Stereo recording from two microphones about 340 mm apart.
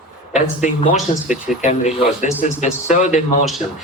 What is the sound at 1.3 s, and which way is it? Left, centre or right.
Speech, left.